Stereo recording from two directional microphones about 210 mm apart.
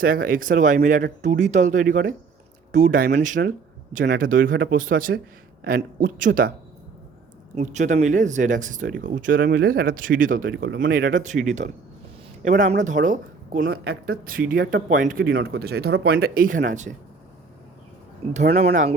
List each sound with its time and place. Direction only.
0.0 s speech: 45° right (ahead or behind)
7.5 s speech: 35° right (ahead or behind)
18.3 s speech: 30° right (ahead or behind)